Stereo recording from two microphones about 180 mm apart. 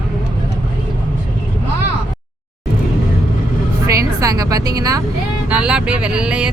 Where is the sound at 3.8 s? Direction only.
20° right (ahead or behind).